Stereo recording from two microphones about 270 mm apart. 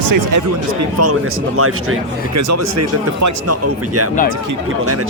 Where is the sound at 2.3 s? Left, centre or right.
Right.